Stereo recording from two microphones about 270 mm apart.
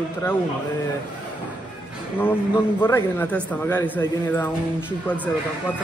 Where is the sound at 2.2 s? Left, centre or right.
Centre.